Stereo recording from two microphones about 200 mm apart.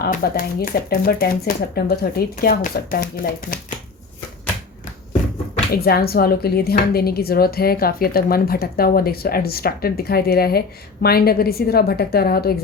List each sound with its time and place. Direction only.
0.0 s speech: 45° left (ahead or behind)
5.7 s speech: 50° left (ahead or behind)